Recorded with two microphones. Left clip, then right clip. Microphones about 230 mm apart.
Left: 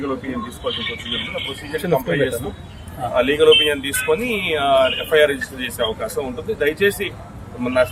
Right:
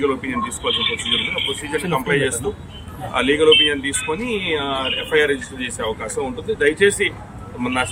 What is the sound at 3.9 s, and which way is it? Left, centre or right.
Speech, left.